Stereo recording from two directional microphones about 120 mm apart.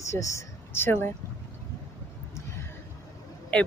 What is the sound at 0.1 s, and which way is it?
Speech, 25° left (ahead or behind).